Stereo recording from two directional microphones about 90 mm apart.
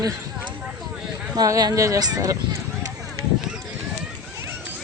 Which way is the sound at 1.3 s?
45° right (ahead or behind).